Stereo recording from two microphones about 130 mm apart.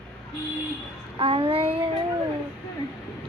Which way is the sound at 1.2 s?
45° right (ahead or behind).